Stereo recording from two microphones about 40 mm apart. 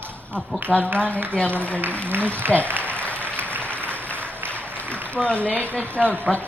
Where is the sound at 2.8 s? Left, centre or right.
Left.